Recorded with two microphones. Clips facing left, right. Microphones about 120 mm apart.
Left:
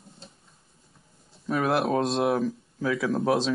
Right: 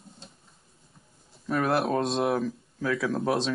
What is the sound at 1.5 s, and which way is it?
Speech, centre (ahead or behind).